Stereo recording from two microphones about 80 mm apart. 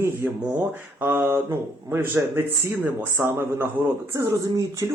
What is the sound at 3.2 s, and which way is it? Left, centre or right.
Speech, right.